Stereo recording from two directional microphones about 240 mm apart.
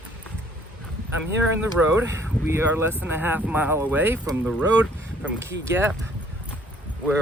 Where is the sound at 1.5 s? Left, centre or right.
Centre.